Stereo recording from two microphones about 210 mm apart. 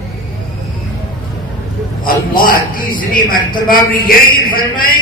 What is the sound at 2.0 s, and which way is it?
A man's voice, 40° left (ahead or behind).